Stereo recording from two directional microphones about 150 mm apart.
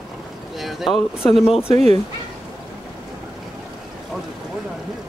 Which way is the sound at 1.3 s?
Centre (ahead or behind).